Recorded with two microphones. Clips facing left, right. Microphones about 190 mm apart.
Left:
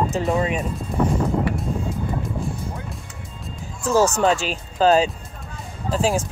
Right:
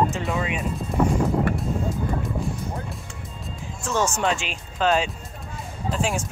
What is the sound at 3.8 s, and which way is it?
Speech, 35° left (ahead or behind).